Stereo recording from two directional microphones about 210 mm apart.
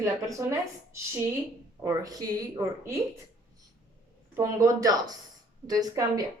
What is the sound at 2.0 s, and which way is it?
Speech, 15° right (ahead or behind).